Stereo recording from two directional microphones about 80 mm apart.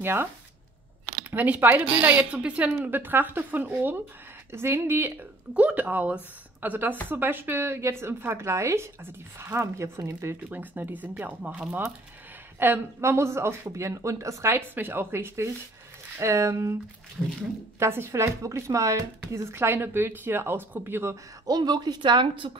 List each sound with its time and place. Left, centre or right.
0.0 s speech: right
1.3 s speech: right
5.5 s speech: centre; by 10.3 s right
10.5 s speech: right
17.7 s speech: right
21.5 s a woman's voice: right